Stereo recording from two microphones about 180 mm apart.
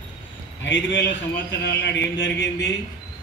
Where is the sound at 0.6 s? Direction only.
90° left.